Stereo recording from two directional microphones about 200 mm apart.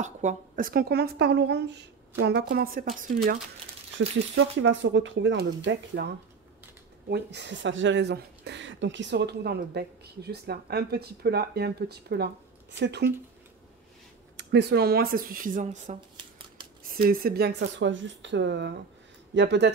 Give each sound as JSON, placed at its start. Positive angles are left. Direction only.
{"t": 0.0, "sound": "speech", "side_deg": -35}
{"t": 4.4, "sound": "speech", "side_deg": -65}
{"t": 14.3, "sound": "speech", "side_deg": -55}
{"t": 16.9, "sound": "speech", "side_deg": -45}